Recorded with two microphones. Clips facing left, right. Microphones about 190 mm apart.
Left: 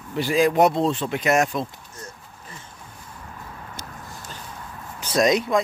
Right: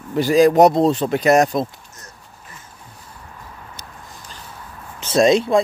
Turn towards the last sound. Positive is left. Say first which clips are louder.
# right 5 dB
turn(degrees=-30)  # may be behind; listen again after turning